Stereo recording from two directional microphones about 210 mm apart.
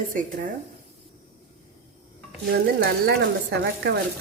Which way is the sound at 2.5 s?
50° right (ahead or behind).